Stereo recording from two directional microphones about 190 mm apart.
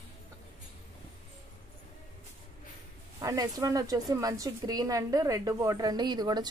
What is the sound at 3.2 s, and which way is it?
Speech, 20° right (ahead or behind).